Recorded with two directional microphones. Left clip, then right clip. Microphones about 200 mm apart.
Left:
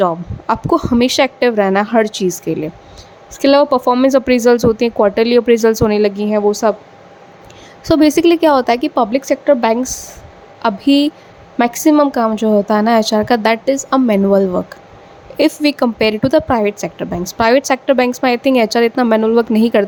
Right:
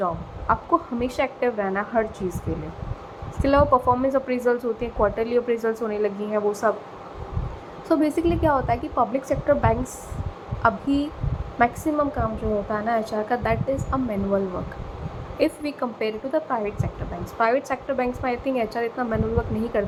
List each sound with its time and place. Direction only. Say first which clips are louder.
0.0 s a woman's voice: left 10 dB; 50° left (ahead or behind)
3.4 s a woman's voice: left 8 dB; 45° left (ahead or behind)
7.9 s a woman's voice: left 11 dB; 50° left (ahead or behind)